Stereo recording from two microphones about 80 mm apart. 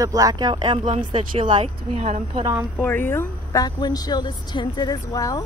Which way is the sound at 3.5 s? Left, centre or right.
Left.